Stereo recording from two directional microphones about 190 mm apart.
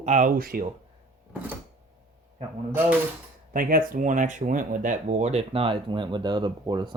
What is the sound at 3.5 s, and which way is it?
Speech, 50° right (ahead or behind).